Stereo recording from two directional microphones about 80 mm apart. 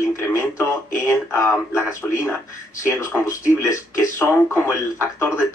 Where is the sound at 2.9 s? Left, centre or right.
Left.